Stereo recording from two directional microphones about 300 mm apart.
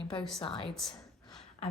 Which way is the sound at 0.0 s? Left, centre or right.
Centre.